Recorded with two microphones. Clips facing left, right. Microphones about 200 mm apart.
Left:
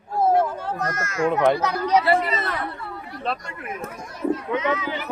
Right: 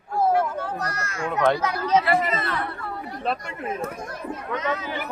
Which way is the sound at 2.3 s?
55° right (ahead or behind).